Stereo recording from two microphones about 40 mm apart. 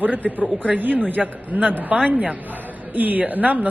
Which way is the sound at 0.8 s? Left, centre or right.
Right.